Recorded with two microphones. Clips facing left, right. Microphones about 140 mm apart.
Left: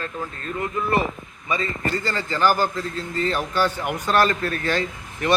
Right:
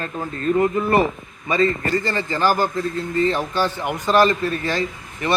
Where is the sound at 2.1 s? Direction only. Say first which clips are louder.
Left 1 dB; 25° right (ahead or behind).